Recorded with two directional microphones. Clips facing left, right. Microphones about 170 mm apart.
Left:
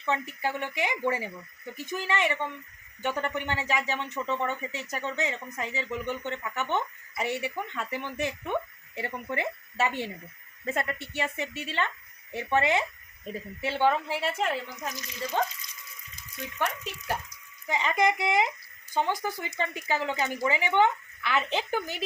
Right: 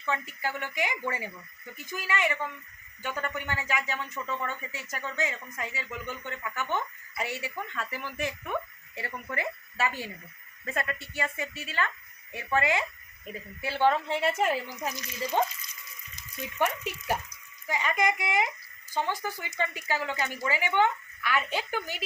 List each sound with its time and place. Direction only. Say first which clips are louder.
0.0 s a woman's voice: left 3 dB; 20° left (ahead or behind)
14.2 s a woman's voice: right 2 dB; 5° right (ahead or behind)
16.6 s speech: right 3 dB; 10° right (ahead or behind)
17.7 s speech: left 2 dB; 20° left (ahead or behind)